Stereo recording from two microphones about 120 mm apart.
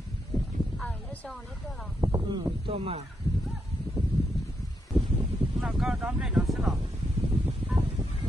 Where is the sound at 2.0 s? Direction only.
35° right (ahead or behind).